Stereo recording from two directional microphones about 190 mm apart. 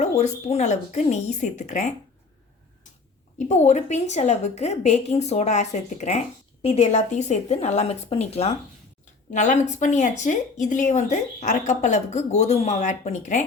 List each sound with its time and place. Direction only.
0.0 s a woman's voice: 35° left (ahead or behind)
3.3 s a woman's voice: 35° left (ahead or behind)